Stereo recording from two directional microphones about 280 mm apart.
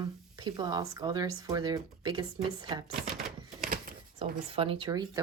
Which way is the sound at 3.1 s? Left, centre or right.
Centre.